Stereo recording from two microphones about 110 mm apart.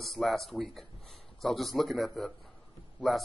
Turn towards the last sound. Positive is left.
turn(degrees=0)  # may be behind; listen again after turning